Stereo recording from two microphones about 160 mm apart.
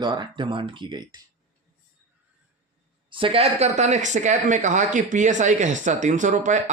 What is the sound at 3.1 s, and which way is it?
Speech, 35° right (ahead or behind).